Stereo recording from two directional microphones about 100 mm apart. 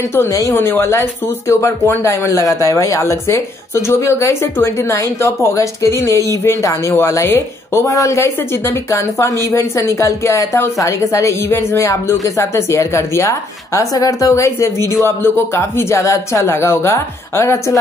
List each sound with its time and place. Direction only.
0.1 s a woman's voice: 30° left (ahead or behind)